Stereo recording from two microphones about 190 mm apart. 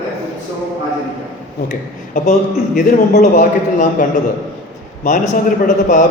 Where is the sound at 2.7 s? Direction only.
40° left (ahead or behind).